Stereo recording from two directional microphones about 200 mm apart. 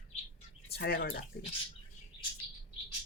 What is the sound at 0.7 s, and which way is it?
Speech, 55° left (ahead or behind).